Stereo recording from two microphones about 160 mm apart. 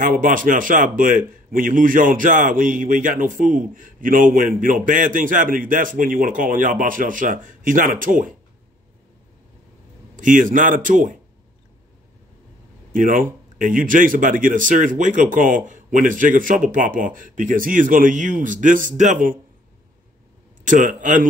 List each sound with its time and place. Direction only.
0.0 s speech: 55° right (ahead or behind)
10.1 s speech: 55° right (ahead or behind)
12.9 s speech: 55° right (ahead or behind)
20.6 s a man's voice: 50° right (ahead or behind)